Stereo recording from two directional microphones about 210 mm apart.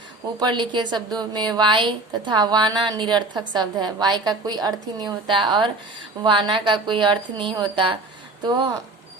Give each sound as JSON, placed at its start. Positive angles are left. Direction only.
{"t": 0.3, "sound": "a woman's voice", "side_deg": -20}